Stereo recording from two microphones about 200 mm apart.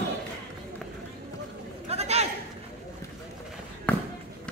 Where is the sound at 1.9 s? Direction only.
30° right (ahead or behind).